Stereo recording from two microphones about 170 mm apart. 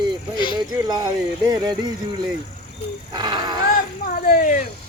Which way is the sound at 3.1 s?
25° right (ahead or behind).